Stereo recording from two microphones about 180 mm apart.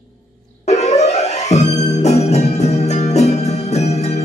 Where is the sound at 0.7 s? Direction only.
35° left (ahead or behind).